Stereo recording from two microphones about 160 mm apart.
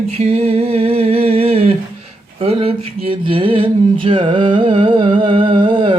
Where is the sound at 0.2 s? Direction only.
40° right (ahead or behind).